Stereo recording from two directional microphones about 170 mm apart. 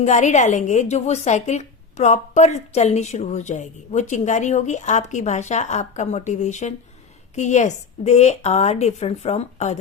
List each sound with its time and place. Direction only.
0.0 s a woman's voice: 45° left (ahead or behind)